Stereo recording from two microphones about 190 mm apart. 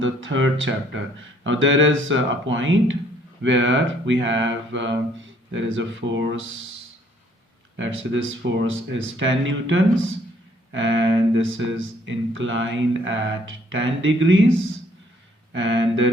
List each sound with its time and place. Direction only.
0.0 s mantra: 85° right
1.5 s mantra: 85° right
3.4 s speech: 80° right
7.8 s mantra: 80° right
8.4 s mantra: 65° right (ahead or behind); by 11.6 s 90° right
12.0 s mantra: 80° right
15.5 s speech: 75° right (ahead or behind)